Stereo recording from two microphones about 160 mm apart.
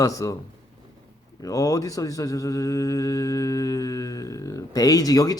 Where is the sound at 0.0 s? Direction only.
20° left (ahead or behind).